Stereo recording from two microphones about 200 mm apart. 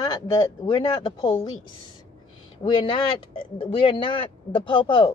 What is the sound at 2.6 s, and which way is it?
Speech, 25° left (ahead or behind).